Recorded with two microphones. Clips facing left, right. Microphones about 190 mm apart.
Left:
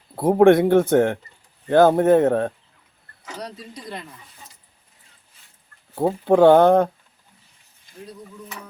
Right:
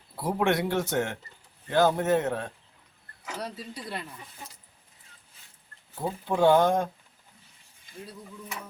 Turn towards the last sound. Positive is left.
turn(degrees=60)  # may be behind; listen again after turning